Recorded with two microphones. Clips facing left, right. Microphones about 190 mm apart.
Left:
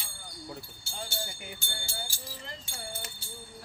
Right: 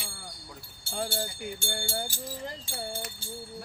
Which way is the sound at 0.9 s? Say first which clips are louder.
Right 7 dB; 60° right (ahead or behind).